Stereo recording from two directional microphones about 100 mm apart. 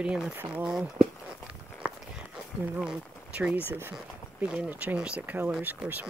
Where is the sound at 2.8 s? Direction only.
10° right (ahead or behind).